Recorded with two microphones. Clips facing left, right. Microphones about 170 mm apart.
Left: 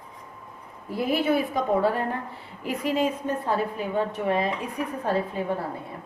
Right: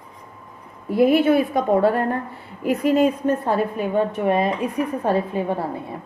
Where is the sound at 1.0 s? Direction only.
65° right (ahead or behind); by 3.0 s 45° right (ahead or behind).